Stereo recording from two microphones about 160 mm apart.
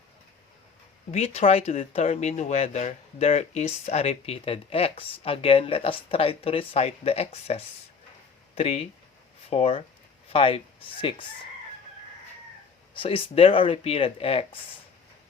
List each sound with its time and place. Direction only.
1.1 s speech: 40° left (ahead or behind)
12.9 s speech: 35° left (ahead or behind)